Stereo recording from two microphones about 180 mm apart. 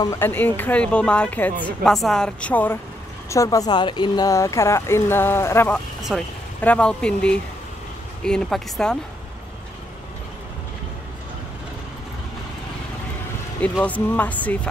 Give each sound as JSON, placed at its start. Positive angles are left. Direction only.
{"t": 0.0, "sound": "a woman's voice", "side_deg": 15}
{"t": 13.6, "sound": "a woman's voice", "side_deg": 10}